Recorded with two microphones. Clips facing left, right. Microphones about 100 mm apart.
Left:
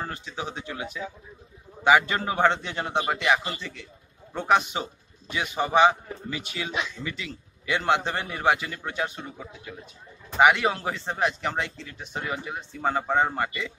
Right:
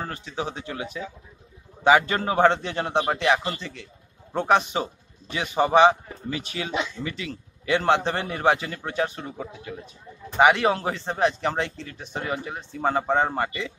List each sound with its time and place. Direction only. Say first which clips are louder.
0.4 s speech: right 4 dB; 35° right (ahead or behind)
1.9 s speech: right 2 dB; 35° right (ahead or behind)